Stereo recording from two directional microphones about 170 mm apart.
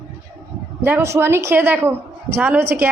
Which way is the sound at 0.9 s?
15° right (ahead or behind).